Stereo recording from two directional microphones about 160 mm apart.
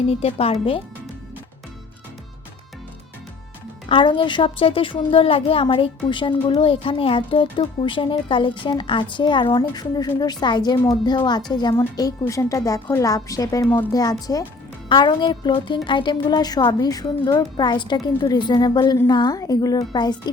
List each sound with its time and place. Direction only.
0.1 s a woman's voice: 40° left (ahead or behind)
3.8 s a woman's voice: 30° left (ahead or behind)